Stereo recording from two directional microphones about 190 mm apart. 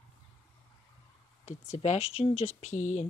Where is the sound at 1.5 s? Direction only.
35° left (ahead or behind).